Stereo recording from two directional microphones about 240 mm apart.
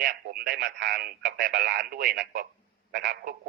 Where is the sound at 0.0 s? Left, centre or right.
Right.